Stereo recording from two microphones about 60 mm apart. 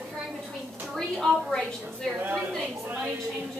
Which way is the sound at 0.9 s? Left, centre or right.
Centre.